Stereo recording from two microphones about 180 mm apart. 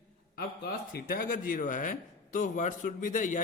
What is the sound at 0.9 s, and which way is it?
Speech, 50° left (ahead or behind).